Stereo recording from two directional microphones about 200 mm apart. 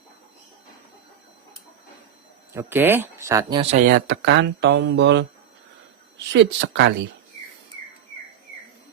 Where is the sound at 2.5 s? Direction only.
10° right (ahead or behind); by 3.8 s 25° right (ahead or behind).